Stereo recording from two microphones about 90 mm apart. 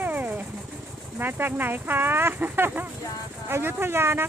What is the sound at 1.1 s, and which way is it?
Speech, 25° right (ahead or behind).